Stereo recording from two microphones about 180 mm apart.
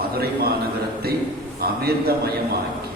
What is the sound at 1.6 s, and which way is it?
Speech, 60° right (ahead or behind).